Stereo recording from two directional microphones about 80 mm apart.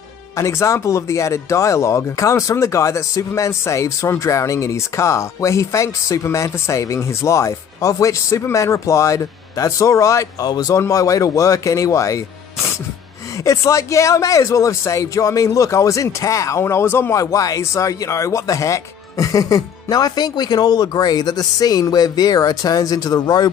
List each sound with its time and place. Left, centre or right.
0.4 s speech: left
13.4 s speech: left
17.1 s speech: left